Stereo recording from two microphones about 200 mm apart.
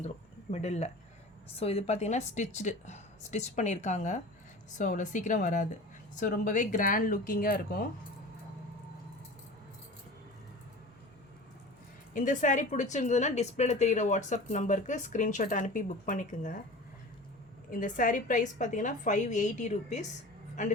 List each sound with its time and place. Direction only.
0.5 s a woman's voice: 35° left (ahead or behind)
12.1 s a woman's voice: 40° left (ahead or behind)
17.7 s a woman's voice: 40° left (ahead or behind)